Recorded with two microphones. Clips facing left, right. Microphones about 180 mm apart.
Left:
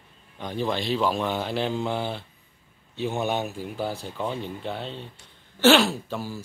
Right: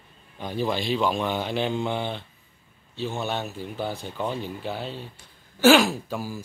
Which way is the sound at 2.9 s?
15° left (ahead or behind).